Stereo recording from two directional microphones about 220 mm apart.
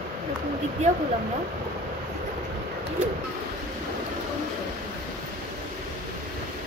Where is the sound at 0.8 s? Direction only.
30° right (ahead or behind).